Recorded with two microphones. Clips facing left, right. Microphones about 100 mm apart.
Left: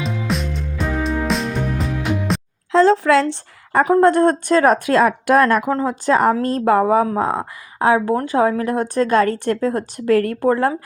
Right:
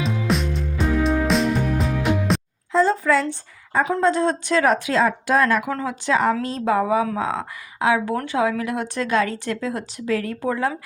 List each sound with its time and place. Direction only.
0.0 s music: centre (ahead or behind)
2.7 s a woman's voice: 85° left
3.8 s speech: 55° left (ahead or behind)